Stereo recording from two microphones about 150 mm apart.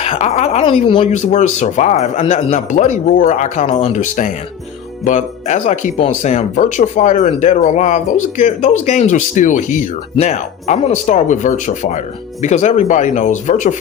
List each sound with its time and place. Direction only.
0.0 s speech: 45° left (ahead or behind)